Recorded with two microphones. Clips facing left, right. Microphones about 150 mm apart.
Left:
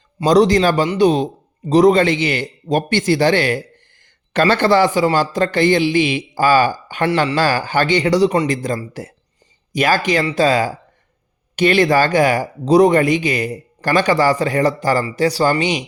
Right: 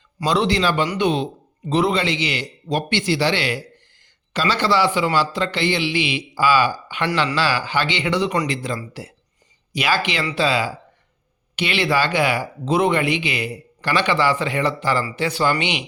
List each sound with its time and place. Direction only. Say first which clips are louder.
0.3 s speech: left 7 dB; 40° left (ahead or behind)
8.5 s speech: left 5 dB; 45° left (ahead or behind)